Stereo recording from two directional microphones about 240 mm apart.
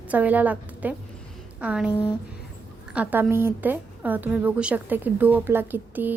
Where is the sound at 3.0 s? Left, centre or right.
Centre.